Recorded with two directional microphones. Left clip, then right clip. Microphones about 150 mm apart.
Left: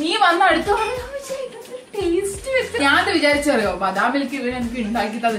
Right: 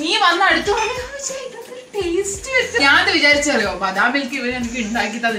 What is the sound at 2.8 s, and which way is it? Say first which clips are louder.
A woman's voice: right 4 dB; 20° left (ahead or behind).